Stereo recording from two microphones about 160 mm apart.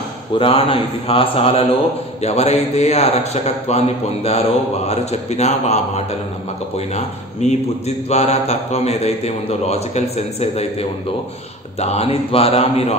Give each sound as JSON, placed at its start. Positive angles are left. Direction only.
{"t": 0.4, "sound": "a man's voice", "side_deg": 35}
{"t": 7.4, "sound": "a man's voice", "side_deg": 45}